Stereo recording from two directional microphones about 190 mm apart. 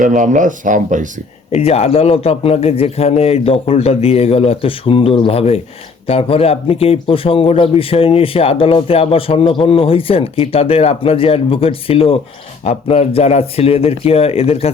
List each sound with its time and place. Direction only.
0.0 s speech: 45° right (ahead or behind)
1.5 s a man's voice: 35° left (ahead or behind)